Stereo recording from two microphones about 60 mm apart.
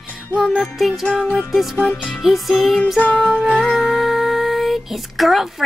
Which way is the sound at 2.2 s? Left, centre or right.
Centre.